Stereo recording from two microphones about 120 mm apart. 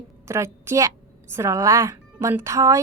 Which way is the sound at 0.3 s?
20° right (ahead or behind).